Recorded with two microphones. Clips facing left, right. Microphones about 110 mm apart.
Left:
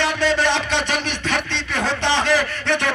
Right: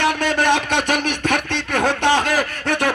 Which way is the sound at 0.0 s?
50° right (ahead or behind).